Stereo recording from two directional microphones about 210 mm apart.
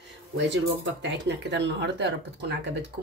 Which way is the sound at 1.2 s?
55° right (ahead or behind).